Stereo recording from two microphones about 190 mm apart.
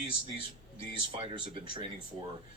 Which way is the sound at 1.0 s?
25° right (ahead or behind).